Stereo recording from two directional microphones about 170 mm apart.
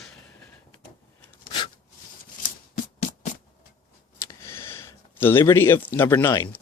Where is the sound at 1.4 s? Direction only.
30° left (ahead or behind).